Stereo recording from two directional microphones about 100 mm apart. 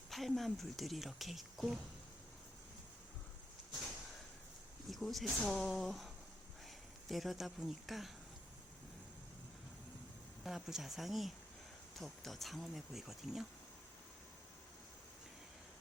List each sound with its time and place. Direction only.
0.1 s speech: centre (ahead or behind)
4.9 s speech: centre (ahead or behind)
7.1 s speech: centre (ahead or behind)
10.4 s speech: 5° right (ahead or behind)